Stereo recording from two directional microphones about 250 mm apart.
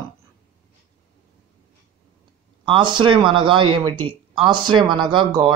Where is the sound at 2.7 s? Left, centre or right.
Centre.